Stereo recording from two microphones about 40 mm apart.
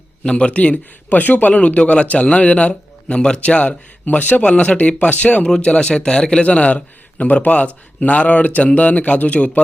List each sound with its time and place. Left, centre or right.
0.3 s a man's voice: left
3.2 s a man's voice: left
4.0 s a man's voice: left
4.4 s a man's voice: left
5.5 s a man's voice: left